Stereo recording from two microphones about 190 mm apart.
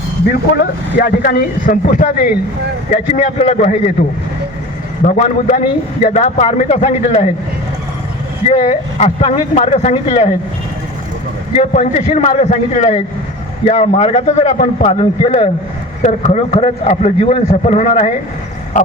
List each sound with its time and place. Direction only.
0.6 s speech: 50° left (ahead or behind)
2.9 s a man's voice: 35° left (ahead or behind)
5.0 s a man's voice: 40° left (ahead or behind)
8.4 s a man's voice: 40° left (ahead or behind)
11.5 s a man's voice: 35° left (ahead or behind)